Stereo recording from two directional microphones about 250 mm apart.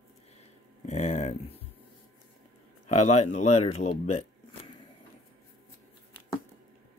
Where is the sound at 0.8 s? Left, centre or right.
Left.